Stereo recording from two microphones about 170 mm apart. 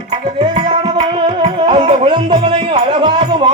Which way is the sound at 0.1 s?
35° right (ahead or behind).